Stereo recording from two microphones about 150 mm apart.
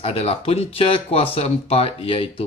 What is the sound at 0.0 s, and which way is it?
Speech, 40° left (ahead or behind).